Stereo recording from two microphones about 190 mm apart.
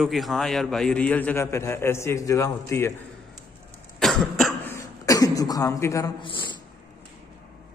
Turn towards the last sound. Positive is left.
turn(degrees=25)  # may be behind; listen again after turning